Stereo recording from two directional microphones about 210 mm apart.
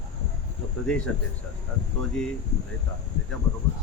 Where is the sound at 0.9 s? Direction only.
5° left (ahead or behind).